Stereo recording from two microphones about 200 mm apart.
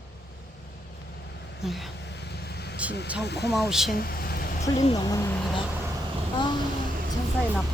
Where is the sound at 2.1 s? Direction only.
55° left (ahead or behind).